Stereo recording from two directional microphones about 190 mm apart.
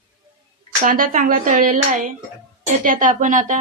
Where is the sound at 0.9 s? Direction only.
45° right (ahead or behind).